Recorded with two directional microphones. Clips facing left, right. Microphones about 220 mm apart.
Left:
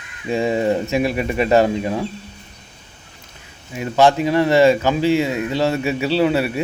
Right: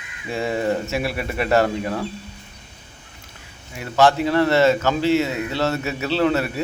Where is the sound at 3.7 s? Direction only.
15° left (ahead or behind).